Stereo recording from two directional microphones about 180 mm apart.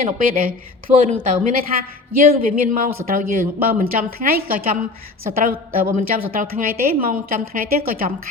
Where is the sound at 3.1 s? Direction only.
50° right (ahead or behind).